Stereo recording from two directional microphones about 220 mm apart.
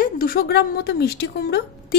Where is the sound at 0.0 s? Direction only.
40° left (ahead or behind).